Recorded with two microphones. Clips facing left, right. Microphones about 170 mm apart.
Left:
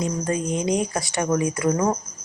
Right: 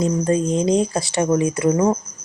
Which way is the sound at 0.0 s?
30° right (ahead or behind).